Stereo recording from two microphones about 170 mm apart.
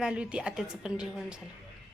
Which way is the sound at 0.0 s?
5° right (ahead or behind).